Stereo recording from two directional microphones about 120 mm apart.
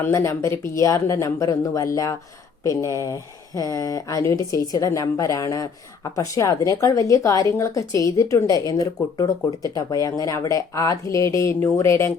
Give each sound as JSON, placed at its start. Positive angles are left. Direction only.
{"t": 0.0, "sound": "speech", "side_deg": 25}
{"t": 9.7, "sound": "speech", "side_deg": 30}